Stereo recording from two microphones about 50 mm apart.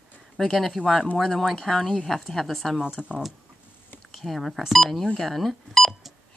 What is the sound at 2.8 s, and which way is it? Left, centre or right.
Speech, right.